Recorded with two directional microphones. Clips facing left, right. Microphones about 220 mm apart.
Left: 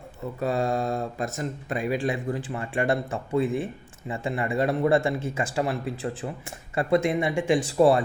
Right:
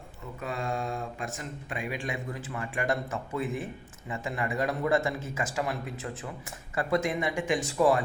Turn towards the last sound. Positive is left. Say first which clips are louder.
# left 5 dB
turn(degrees=30)  # may be behind; listen again after turning